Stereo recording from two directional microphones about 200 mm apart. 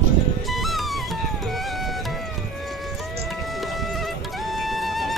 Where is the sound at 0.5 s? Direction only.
Centre (ahead or behind).